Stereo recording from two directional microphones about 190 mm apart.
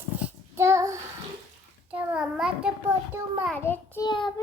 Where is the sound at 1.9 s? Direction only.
5° right (ahead or behind).